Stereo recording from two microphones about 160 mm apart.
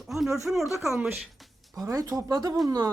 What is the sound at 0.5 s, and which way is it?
Speech, 5° right (ahead or behind).